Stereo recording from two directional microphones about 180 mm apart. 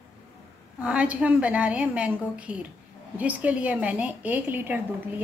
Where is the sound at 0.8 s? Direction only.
5° right (ahead or behind).